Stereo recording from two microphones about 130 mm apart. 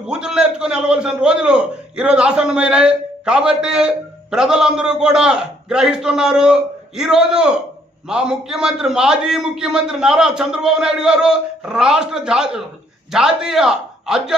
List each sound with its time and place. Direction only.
0.0 s a man's voice: 5° right (ahead or behind)